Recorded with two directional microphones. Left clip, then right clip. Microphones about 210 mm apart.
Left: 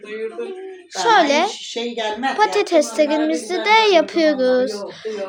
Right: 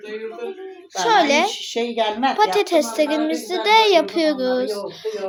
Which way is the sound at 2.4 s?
10° left (ahead or behind).